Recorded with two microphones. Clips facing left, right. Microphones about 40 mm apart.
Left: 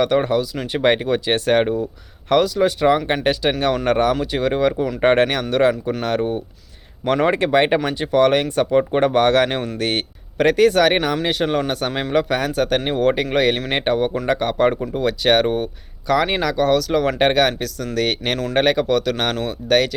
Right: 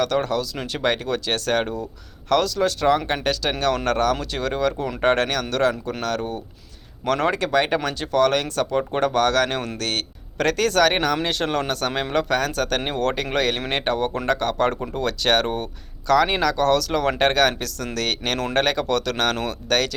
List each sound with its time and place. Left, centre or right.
0.0 s speech: centre
4.8 s speech: centre
5.0 s speech: left